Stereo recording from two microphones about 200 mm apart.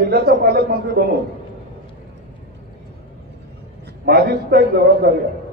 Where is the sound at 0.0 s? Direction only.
50° right (ahead or behind).